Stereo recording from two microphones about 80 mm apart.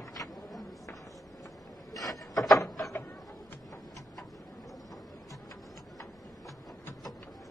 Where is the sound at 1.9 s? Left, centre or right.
Left.